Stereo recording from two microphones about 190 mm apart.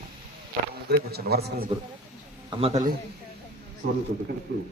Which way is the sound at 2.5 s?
30° right (ahead or behind).